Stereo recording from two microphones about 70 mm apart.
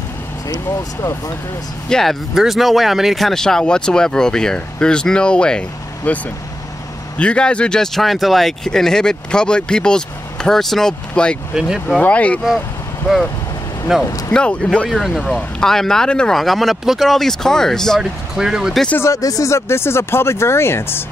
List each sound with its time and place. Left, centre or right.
1.9 s speech: centre
7.2 s speech: centre
13.9 s speech: centre
14.3 s speech: centre
14.9 s speech: centre
18.3 s speech: centre
19.0 s speech: left